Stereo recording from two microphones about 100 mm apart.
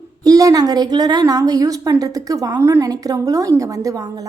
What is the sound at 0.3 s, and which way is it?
A woman's voice, 35° right (ahead or behind).